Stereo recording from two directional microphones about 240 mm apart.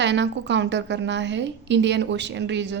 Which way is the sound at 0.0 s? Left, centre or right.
Right.